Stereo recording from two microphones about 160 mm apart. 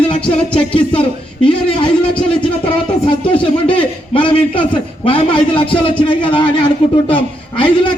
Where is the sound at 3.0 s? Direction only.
35° left (ahead or behind).